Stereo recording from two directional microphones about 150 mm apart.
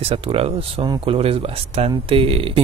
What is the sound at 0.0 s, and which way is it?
Speech, 40° right (ahead or behind).